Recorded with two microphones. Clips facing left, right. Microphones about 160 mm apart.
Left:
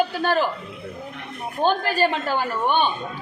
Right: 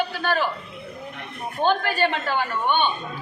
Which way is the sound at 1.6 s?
35° left (ahead or behind).